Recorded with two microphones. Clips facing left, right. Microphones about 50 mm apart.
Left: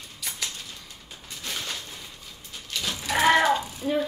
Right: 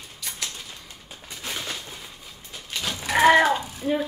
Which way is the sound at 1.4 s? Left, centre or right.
Centre.